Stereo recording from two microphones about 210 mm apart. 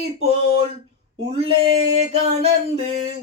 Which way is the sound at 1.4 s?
30° right (ahead or behind).